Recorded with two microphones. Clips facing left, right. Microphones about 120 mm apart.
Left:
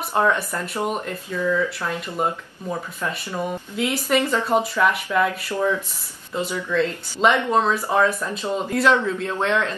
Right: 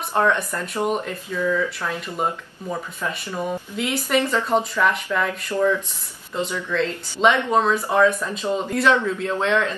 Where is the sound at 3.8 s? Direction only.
5° left (ahead or behind).